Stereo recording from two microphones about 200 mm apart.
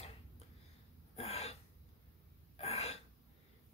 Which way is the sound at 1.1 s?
30° left (ahead or behind).